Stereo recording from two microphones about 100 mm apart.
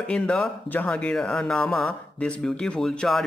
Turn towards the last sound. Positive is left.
turn(degrees=5)  # may be behind; listen again after turning